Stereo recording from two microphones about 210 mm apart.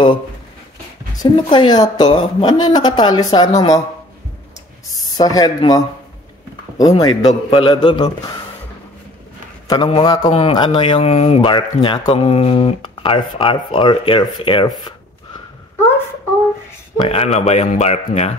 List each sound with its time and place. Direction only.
1.1 s speech: 20° left (ahead or behind)
4.9 s speech: 15° left (ahead or behind)
7.0 s speech: 20° left (ahead or behind)
9.7 s speech: 25° left (ahead or behind)
16.9 s speech: 30° left (ahead or behind)